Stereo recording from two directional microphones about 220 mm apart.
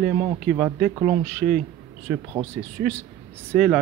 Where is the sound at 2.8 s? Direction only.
45° right (ahead or behind).